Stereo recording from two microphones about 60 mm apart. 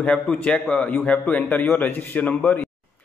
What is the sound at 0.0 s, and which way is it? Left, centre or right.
A man's voice, centre.